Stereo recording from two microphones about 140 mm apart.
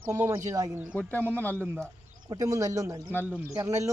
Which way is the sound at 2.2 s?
25° right (ahead or behind).